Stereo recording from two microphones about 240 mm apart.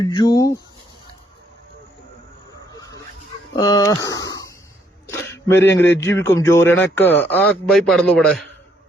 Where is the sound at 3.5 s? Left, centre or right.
Centre.